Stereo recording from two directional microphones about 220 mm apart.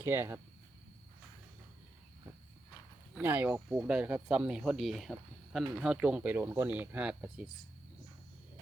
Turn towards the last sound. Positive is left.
turn(degrees=-5)  # may be behind; listen again after turning